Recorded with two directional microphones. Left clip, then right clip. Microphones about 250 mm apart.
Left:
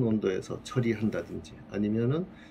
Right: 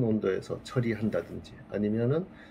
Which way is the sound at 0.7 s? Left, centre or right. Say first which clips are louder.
Even; centre.